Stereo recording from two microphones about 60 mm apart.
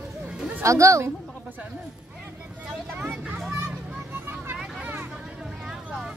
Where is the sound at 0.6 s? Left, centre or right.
Right.